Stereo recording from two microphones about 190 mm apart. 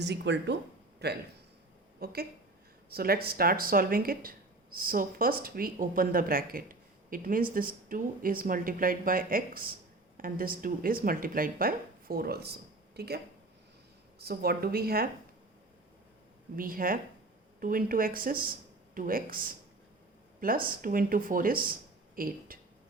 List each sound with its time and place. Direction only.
0.0 s speech: 65° right (ahead or behind)
16.6 s speech: 50° right (ahead or behind)